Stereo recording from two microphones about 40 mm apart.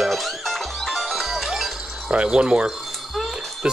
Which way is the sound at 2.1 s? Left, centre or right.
Right.